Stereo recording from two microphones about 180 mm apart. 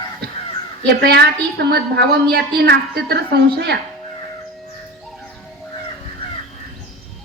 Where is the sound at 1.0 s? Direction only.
65° right (ahead or behind).